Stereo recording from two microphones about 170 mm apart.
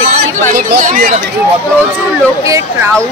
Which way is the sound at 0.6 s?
50° right (ahead or behind).